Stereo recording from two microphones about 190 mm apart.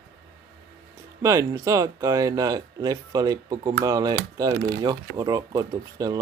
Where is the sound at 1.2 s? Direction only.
15° right (ahead or behind).